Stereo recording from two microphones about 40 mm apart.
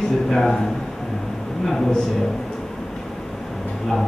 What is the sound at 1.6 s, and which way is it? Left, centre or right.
Speech, centre.